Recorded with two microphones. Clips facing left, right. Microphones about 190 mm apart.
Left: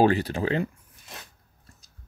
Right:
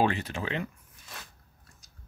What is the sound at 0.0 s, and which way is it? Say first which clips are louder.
Speech: left 7 dB; 35° left (ahead or behind).